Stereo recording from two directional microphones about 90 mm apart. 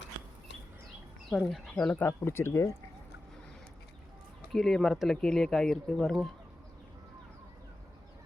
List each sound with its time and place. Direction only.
1.4 s speech: centre (ahead or behind)
1.9 s speech: 25° left (ahead or behind)
4.5 s speech: 5° left (ahead or behind)